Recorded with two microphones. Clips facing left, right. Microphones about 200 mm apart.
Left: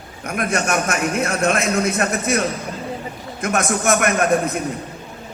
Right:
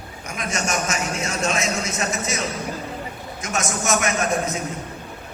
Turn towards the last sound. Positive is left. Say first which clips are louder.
# left 5 dB
turn(degrees=60)  # may be behind; listen again after turning